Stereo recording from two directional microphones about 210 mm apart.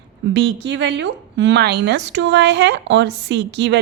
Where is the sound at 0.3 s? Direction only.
55° right (ahead or behind).